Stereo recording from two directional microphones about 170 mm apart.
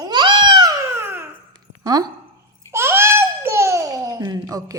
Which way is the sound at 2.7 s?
15° right (ahead or behind).